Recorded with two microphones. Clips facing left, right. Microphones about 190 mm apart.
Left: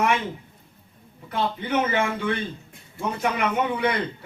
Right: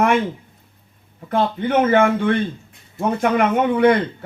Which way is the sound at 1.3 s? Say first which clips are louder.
Right 6 dB; 55° right (ahead or behind).